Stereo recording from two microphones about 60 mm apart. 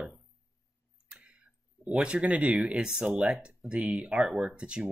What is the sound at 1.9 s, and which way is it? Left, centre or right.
Speech, centre.